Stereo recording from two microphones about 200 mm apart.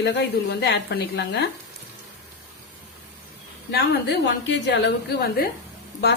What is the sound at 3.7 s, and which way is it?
A woman's voice, 55° left (ahead or behind).